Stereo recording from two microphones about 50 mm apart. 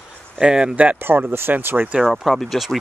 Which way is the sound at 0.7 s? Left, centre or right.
Right.